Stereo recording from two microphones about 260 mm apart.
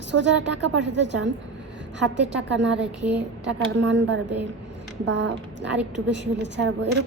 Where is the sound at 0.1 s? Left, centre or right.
Right.